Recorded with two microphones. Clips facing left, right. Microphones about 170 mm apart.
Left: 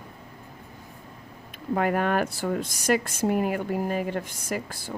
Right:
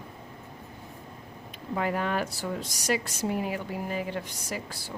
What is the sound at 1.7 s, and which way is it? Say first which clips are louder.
Speech: left 5 dB; 55° left (ahead or behind).